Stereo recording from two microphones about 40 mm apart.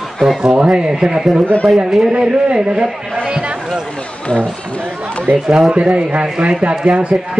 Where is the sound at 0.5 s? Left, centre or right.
Right.